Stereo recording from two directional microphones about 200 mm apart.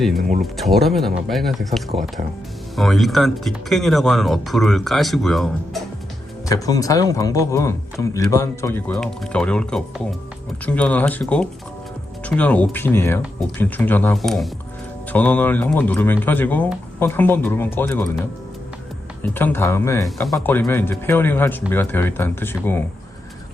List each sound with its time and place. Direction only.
0.4 s speech: centre (ahead or behind)
6.5 s speech: 15° left (ahead or behind)
8.9 s speech: 5° left (ahead or behind)
19.4 s speech: 10° left (ahead or behind)